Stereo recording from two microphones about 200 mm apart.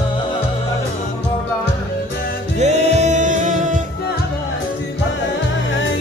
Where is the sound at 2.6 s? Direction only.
35° right (ahead or behind).